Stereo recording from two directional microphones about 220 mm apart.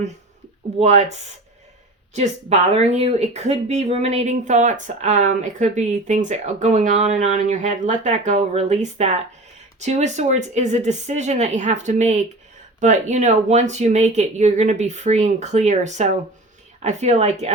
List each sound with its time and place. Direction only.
0.8 s speech: 30° right (ahead or behind)